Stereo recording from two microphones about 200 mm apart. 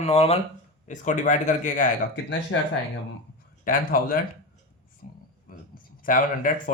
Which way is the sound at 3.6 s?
45° left (ahead or behind).